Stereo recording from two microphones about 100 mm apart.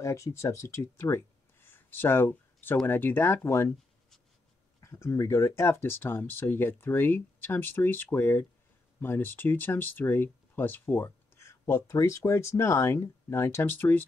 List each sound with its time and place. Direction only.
0.0 s speech: 30° left (ahead or behind)
4.7 s speech: 30° left (ahead or behind)